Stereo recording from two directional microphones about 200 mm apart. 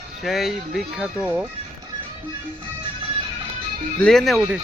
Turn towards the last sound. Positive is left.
turn(degrees=0)  # may be behind; listen again after turning